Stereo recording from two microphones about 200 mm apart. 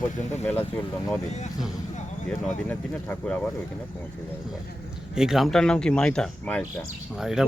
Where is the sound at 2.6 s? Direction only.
10° left (ahead or behind).